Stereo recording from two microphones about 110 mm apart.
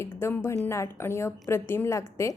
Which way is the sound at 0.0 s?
25° left (ahead or behind).